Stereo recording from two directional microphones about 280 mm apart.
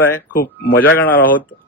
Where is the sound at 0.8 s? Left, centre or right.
Centre.